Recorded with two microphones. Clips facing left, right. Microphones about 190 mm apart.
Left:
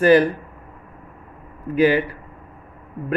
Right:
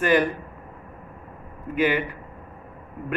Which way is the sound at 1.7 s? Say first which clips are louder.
Left 6 dB; 35° left (ahead or behind).